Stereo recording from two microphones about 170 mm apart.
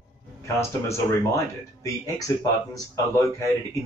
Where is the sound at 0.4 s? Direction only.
15° left (ahead or behind).